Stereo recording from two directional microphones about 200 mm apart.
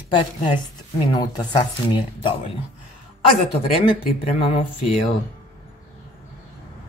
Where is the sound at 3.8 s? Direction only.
25° left (ahead or behind).